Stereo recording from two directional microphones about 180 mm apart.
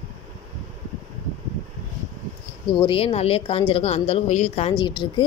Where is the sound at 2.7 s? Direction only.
25° left (ahead or behind).